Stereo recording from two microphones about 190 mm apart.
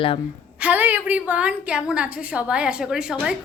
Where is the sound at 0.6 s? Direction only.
10° right (ahead or behind).